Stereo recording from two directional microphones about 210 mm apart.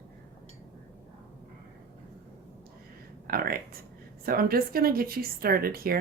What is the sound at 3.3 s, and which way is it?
A woman's voice, 45° right (ahead or behind).